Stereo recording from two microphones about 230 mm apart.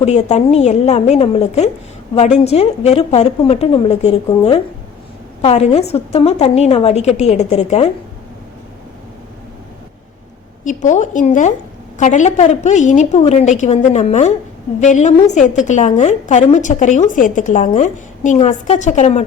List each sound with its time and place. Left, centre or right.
0.0 s a woman's voice: left
10.8 s a woman's voice: left